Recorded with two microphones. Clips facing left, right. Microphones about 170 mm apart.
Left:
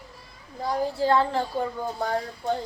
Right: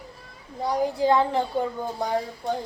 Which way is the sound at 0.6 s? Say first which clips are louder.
Right 2 dB; 15° right (ahead or behind).